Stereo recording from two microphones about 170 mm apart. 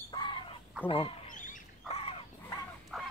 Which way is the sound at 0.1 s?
25° left (ahead or behind).